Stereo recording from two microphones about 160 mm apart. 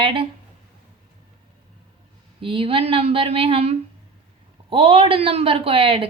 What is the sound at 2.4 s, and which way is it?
A woman's voice, 35° right (ahead or behind).